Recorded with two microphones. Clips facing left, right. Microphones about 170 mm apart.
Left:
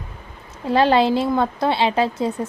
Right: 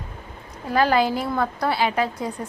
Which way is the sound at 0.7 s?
25° left (ahead or behind).